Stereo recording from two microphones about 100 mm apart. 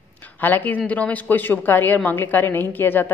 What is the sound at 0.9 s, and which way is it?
A woman's voice, 15° left (ahead or behind).